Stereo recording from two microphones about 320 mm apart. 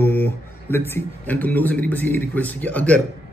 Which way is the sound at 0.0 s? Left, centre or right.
Centre.